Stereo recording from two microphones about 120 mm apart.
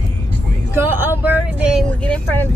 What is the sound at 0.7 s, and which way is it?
Speech, 20° right (ahead or behind).